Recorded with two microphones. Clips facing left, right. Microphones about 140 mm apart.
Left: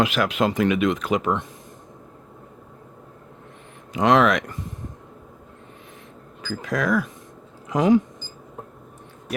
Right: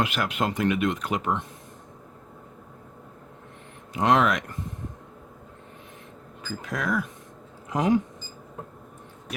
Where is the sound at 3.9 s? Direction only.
90° left.